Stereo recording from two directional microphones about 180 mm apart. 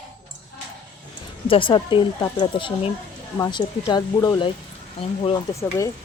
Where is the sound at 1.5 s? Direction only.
30° left (ahead or behind).